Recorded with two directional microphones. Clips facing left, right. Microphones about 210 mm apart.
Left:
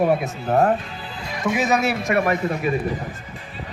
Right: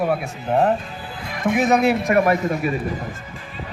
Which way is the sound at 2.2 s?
40° right (ahead or behind).